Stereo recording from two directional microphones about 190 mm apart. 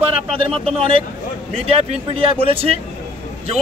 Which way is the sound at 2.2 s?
30° right (ahead or behind).